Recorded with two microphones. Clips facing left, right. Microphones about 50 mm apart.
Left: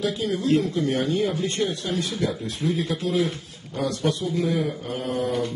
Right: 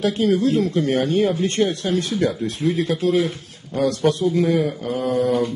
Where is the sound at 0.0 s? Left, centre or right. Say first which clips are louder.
Right 7 dB; right.